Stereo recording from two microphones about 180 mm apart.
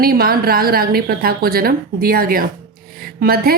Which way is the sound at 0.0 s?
55° right (ahead or behind).